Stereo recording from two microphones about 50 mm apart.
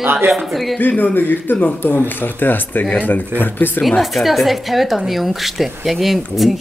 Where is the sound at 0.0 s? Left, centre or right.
Right.